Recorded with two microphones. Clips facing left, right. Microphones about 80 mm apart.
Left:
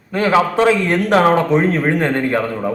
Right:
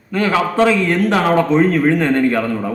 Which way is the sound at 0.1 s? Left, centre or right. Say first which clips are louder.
Left 2 dB; left.